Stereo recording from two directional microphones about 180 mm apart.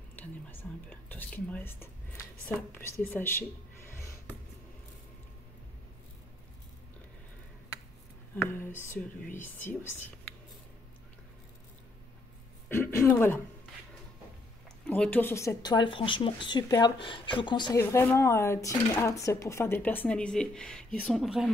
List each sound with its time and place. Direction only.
0.1 s whispering: 10° left (ahead or behind)
2.4 s speech: 10° left (ahead or behind)
8.4 s speech: 10° left (ahead or behind)
12.6 s a sound: 10° left (ahead or behind)
14.9 s speech: 10° left (ahead or behind)